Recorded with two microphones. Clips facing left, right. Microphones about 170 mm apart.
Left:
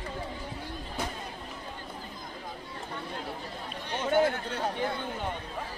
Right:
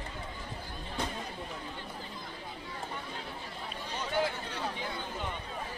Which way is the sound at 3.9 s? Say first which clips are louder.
Left 7 dB; 55° left (ahead or behind).